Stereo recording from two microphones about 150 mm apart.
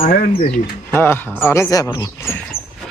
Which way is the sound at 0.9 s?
15° left (ahead or behind).